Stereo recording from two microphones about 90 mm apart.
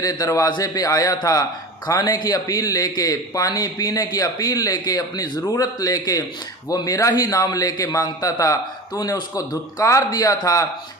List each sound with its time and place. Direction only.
0.0 s a man's voice: 40° left (ahead or behind)